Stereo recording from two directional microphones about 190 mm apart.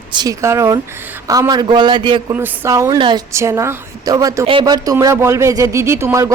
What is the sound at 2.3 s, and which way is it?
A woman's voice, 15° right (ahead or behind).